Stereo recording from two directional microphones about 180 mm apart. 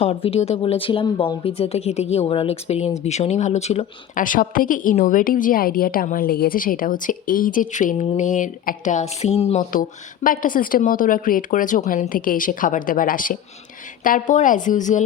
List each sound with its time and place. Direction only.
0.0 s speech: 35° left (ahead or behind)
10.2 s speech: 50° left (ahead or behind)